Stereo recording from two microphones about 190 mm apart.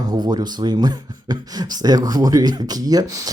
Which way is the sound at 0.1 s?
20° right (ahead or behind).